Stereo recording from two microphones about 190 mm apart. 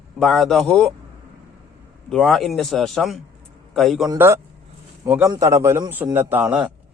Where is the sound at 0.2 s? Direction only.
Centre (ahead or behind).